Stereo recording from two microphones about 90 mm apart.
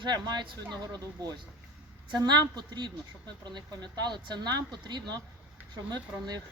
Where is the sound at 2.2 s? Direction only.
55° right (ahead or behind).